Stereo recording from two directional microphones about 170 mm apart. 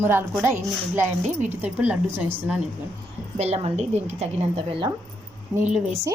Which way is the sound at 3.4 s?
40° right (ahead or behind).